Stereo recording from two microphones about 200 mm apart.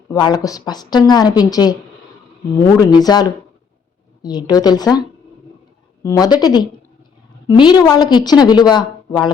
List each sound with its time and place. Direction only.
0.1 s a woman's voice: 20° left (ahead or behind)
2.7 s a woman's voice: 20° left (ahead or behind)